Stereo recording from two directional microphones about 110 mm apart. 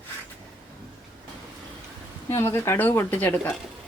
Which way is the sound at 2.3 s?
25° left (ahead or behind).